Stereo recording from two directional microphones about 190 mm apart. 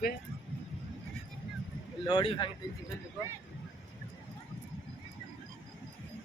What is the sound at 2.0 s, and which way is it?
Speech, 25° left (ahead or behind).